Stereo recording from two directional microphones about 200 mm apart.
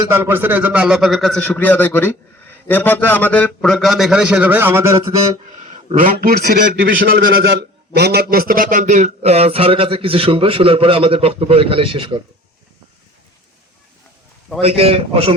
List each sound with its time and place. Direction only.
0.1 s a man's voice: 10° right (ahead or behind)
5.7 s a man's voice: 45° right (ahead or behind); by 12.2 s 25° right (ahead or behind)
14.6 s a man's voice: 30° right (ahead or behind)